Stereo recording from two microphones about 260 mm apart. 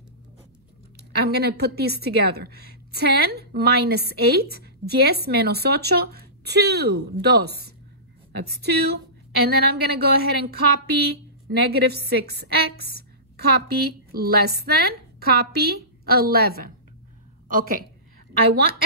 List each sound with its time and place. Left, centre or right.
1.2 s a woman's voice: right